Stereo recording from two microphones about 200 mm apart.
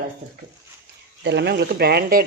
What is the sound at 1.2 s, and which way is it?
Speech, 60° right (ahead or behind).